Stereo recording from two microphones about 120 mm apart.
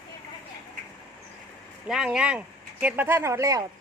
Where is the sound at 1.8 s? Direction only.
5° right (ahead or behind); by 3.6 s 25° right (ahead or behind).